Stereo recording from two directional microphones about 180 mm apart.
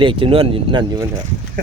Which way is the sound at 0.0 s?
30° right (ahead or behind).